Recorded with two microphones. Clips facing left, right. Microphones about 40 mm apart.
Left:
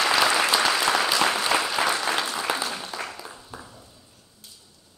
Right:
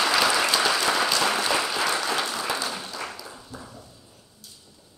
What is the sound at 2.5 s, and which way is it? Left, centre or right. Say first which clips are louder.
Applause: even; centre.